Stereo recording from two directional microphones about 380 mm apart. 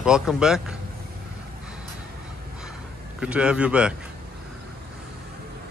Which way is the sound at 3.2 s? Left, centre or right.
Centre.